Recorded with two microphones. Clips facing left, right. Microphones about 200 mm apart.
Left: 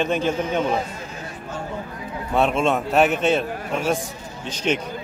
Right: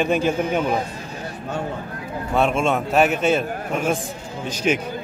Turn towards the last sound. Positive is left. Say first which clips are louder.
# right 2 dB
turn(degrees=-5)  # may be behind; listen again after turning